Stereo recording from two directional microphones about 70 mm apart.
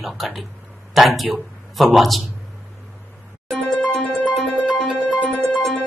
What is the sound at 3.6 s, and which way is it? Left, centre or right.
Harp, left.